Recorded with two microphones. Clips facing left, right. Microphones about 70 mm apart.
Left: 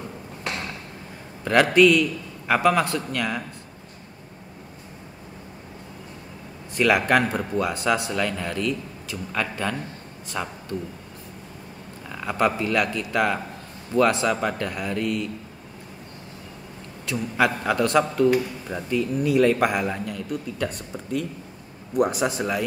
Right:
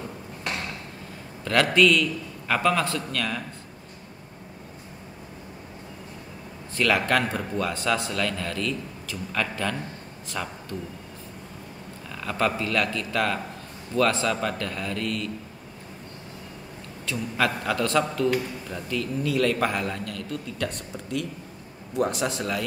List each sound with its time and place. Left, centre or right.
1.4 s a man's voice: centre
6.8 s a man's voice: centre
12.1 s a man's voice: centre
17.0 s a man's voice: centre